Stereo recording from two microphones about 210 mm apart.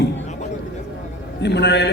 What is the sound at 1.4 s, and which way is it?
Speech, 55° left (ahead or behind).